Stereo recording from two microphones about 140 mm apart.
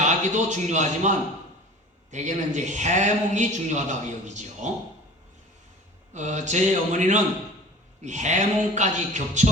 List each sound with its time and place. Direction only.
0.0 s a man's voice: 60° right (ahead or behind)
6.1 s a man's voice: 60° right (ahead or behind)